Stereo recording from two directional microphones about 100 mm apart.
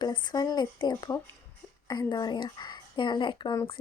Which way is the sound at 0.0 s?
45° left (ahead or behind).